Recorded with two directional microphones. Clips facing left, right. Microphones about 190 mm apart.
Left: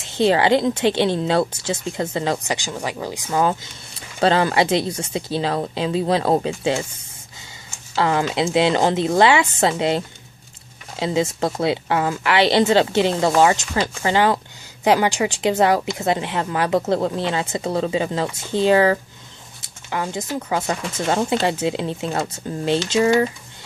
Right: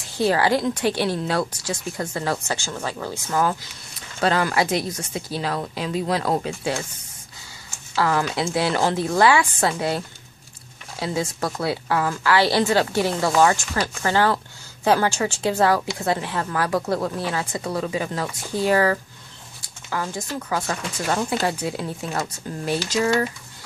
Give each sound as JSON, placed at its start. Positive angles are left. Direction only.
{"t": 0.0, "sound": "a woman's voice", "side_deg": 25}
{"t": 4.2, "sound": "a woman's voice", "side_deg": 25}
{"t": 7.9, "sound": "a woman's voice", "side_deg": 25}